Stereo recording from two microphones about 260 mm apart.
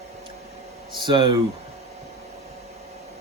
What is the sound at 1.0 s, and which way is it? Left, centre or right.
Speech, centre.